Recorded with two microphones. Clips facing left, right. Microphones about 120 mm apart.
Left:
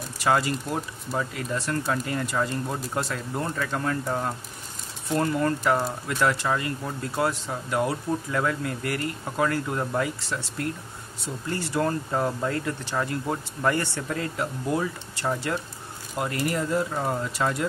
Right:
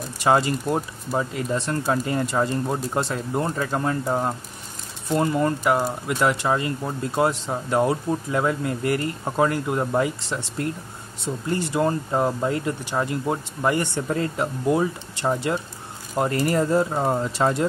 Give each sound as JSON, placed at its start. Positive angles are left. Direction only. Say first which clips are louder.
{"t": 0.2, "sound": "speech", "louder": "right 4 dB", "side_deg": -25}
{"t": 14.0, "sound": "speech", "louder": "right 5 dB", "side_deg": -30}
{"t": 16.2, "sound": "speech", "louder": "right 6 dB", "side_deg": -35}